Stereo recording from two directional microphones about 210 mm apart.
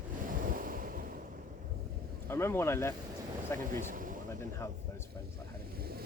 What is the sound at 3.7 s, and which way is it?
Speech, 40° right (ahead or behind).